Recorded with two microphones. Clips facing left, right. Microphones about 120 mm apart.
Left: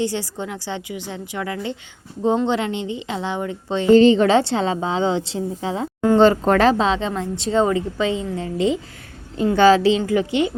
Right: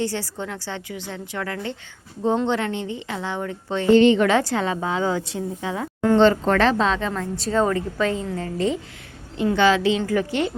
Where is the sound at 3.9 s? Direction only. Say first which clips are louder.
Left 3 dB; 35° left (ahead or behind).